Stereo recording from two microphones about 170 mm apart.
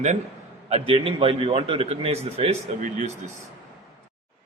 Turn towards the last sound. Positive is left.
turn(degrees=-45)  # may be behind; listen again after turning